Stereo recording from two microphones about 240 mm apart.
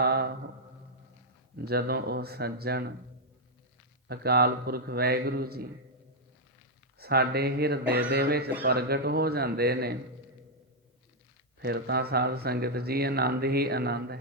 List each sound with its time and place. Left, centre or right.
0.0 s a sound: right
1.5 s speech: right
4.1 s speech: right
7.0 s speech: right
11.6 s speech: right